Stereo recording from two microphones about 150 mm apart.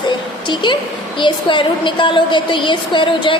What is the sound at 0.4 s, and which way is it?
A woman's voice, 30° left (ahead or behind).